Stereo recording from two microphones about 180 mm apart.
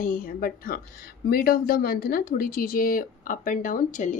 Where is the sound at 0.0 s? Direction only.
50° left (ahead or behind).